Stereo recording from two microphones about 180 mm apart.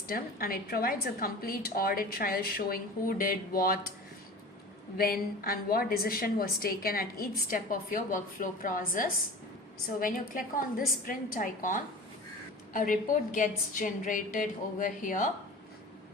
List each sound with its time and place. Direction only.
0.1 s a woman's voice: 55° left (ahead or behind)
4.9 s a woman's voice: 55° left (ahead or behind)